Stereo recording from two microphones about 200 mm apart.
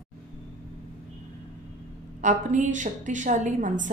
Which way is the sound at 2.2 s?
40° right (ahead or behind).